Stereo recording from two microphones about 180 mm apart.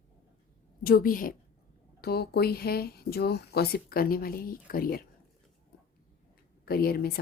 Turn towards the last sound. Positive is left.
turn(degrees=60)  # may be behind; listen again after turning